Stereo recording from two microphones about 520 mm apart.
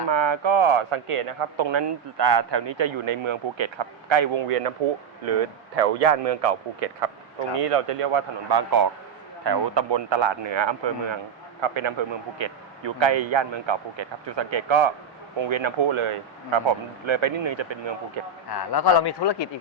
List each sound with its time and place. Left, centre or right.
0.1 s speech: right
8.4 s speech: right
18.4 s a man's voice: left